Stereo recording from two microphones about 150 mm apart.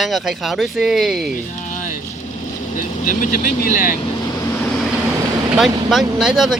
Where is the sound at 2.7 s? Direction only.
65° left (ahead or behind).